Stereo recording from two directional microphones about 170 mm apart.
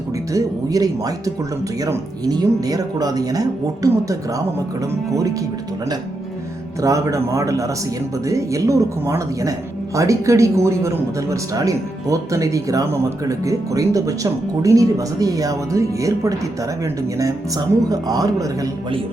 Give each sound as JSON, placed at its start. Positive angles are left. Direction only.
{"t": 0.3, "sound": "speech", "side_deg": -20}
{"t": 6.8, "sound": "speech", "side_deg": -20}